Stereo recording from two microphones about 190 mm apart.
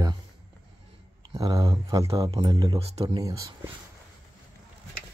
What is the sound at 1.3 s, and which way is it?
Speech, 20° right (ahead or behind).